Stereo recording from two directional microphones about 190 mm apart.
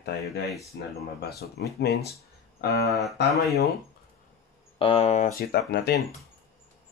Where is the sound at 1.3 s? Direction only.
60° left (ahead or behind).